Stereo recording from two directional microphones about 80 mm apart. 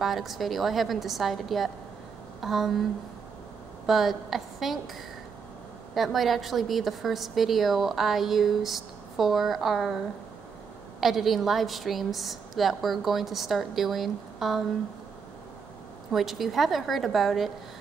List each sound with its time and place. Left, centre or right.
0.0 s a woman's voice: centre
5.9 s a woman's voice: centre
16.1 s a woman's voice: centre